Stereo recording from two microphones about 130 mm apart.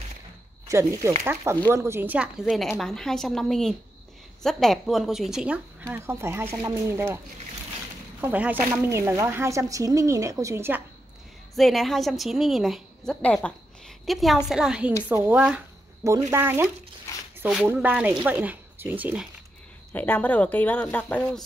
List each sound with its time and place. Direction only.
0.7 s speech: 20° right (ahead or behind)
2.4 s a woman's voice: centre (ahead or behind)
5.9 s speech: 20° right (ahead or behind)
8.2 s speech: 10° right (ahead or behind)
11.5 s a woman's voice: centre (ahead or behind)
19.9 s speech: 15° left (ahead or behind)